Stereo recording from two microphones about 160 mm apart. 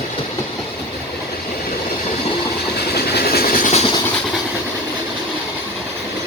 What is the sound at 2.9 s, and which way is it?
Train, 80° left.